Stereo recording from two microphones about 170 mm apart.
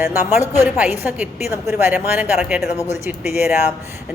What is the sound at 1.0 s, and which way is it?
Speech, 15° right (ahead or behind).